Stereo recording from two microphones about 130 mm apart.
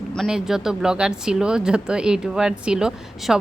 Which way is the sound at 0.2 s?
5° right (ahead or behind).